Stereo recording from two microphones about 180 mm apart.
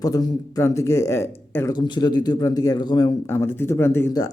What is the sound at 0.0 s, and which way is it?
Speech, 20° left (ahead or behind).